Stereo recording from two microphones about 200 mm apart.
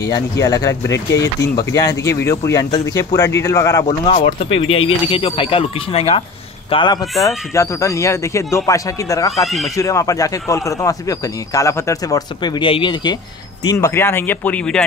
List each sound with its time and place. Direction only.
0.1 s a man's voice: 20° left (ahead or behind)
1.4 s speech: 45° left (ahead or behind)
1.7 s a man's voice: 15° left (ahead or behind)
4.1 s speech: 45° left (ahead or behind)
4.5 s speech: 90° left
5.0 s a man's voice: 25° left (ahead or behind)
9.4 s speech: centre (ahead or behind)
9.8 s a man's voice: 15° left (ahead or behind)